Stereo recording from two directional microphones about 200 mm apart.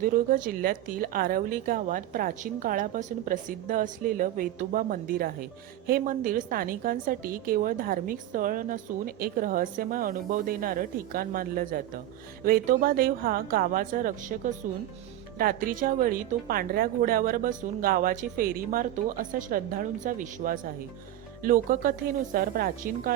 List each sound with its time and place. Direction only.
0.0 s a woman's voice: 45° right (ahead or behind)